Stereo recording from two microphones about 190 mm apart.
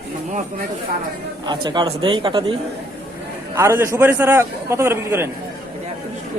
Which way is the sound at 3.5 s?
15° right (ahead or behind).